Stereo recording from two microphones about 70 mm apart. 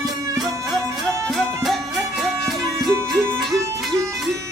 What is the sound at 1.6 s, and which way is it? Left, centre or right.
Music, centre.